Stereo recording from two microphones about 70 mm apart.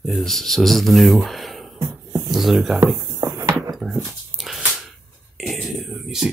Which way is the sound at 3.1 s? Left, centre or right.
Right.